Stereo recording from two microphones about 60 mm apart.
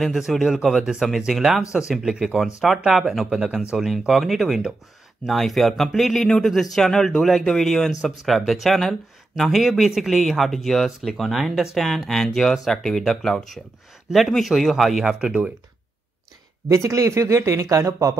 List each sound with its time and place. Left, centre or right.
0.0 s speech: centre
16.6 s speech: right